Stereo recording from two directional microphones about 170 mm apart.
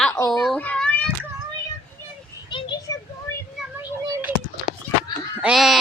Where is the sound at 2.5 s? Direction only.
25° left (ahead or behind).